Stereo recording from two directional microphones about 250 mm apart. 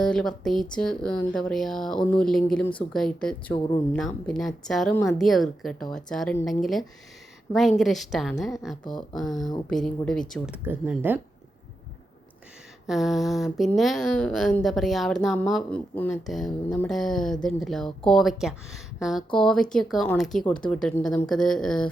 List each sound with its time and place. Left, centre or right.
0.0 s speech: centre
8.8 s speech: centre
9.1 s speech: centre
12.9 s speech: centre